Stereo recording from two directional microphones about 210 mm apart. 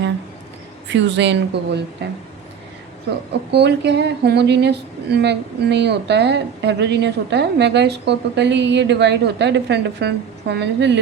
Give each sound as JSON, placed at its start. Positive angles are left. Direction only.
{"t": 0.9, "sound": "speech", "side_deg": -60}
{"t": 3.5, "sound": "speech", "side_deg": -55}